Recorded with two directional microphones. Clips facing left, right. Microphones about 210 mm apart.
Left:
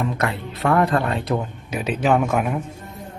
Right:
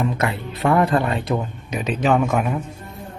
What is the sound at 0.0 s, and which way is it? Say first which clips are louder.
Speech: right 1 dB; centre (ahead or behind).